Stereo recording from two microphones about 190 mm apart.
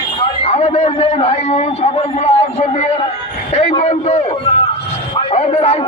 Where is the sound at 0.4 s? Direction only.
35° left (ahead or behind).